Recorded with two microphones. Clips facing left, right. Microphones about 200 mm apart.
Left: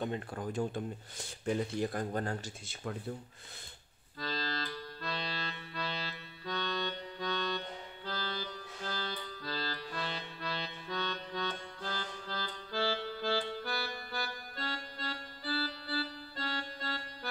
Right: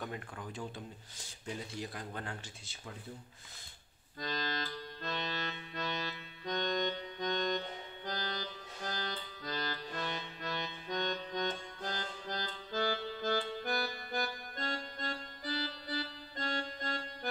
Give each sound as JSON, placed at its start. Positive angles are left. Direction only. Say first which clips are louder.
{"t": 0.0, "sound": "speech", "louder": "left 6 dB", "side_deg": 30}
{"t": 0.4, "sound": "speech", "louder": "left 8 dB", "side_deg": 50}
{"t": 4.2, "sound": "music", "louder": "even", "side_deg": -20}